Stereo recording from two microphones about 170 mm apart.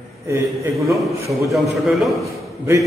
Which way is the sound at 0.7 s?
Centre (ahead or behind).